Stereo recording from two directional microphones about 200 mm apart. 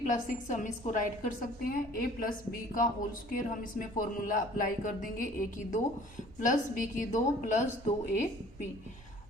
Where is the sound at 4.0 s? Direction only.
40° left (ahead or behind).